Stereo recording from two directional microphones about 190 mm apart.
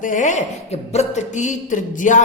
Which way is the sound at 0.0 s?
40° left (ahead or behind).